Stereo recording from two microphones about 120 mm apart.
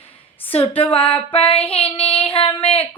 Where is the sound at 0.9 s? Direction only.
45° left (ahead or behind).